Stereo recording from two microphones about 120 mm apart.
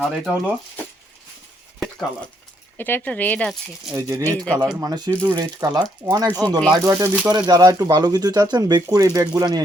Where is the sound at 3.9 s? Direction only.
25° right (ahead or behind).